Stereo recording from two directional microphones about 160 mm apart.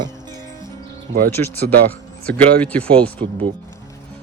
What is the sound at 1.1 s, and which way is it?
Speech, 90° right.